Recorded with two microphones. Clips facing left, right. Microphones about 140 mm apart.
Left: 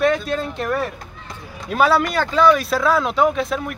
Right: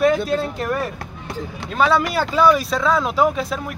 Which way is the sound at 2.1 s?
5° right (ahead or behind).